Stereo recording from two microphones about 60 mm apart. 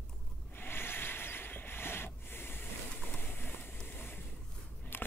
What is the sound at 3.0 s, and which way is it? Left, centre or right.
Vehicle, left.